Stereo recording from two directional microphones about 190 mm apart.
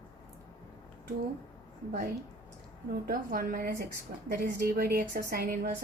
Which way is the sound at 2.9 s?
50° right (ahead or behind).